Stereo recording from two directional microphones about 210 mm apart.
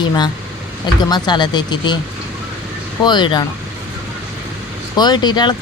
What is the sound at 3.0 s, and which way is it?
Speech, 20° left (ahead or behind).